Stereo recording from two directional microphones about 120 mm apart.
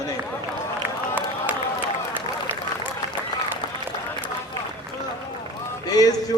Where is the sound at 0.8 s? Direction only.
15° right (ahead or behind).